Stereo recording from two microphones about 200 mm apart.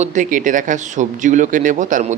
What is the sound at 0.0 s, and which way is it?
Speech, 40° right (ahead or behind).